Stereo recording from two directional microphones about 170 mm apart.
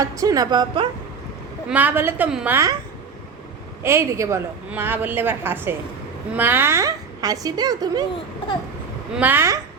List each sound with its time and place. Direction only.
0.0 s speech: 20° right (ahead or behind)
1.7 s a woman's voice: 10° right (ahead or behind)
3.8 s a woman's voice: 15° right (ahead or behind)
9.1 s a woman's voice: 10° right (ahead or behind)